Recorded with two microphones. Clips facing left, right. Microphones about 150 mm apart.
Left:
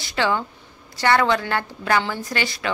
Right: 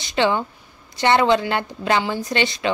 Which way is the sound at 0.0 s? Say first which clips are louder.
Right 3 dB; 20° right (ahead or behind).